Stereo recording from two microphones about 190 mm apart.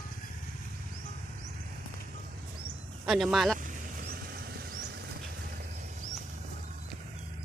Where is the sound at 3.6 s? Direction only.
45° right (ahead or behind).